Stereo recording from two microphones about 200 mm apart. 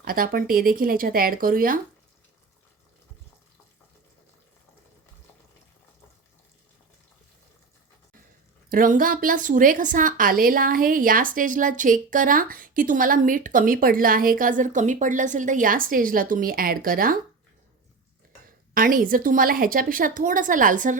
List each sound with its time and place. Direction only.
0.0 s a woman's voice: 45° right (ahead or behind)
8.7 s a woman's voice: 45° right (ahead or behind)
18.4 s a woman's voice: 45° right (ahead or behind)